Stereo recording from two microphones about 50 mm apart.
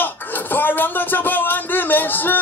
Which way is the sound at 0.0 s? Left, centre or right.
Left.